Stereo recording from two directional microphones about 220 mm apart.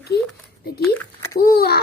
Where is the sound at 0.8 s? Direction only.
10° left (ahead or behind).